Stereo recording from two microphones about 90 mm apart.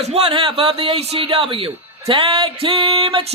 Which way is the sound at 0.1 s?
80° right.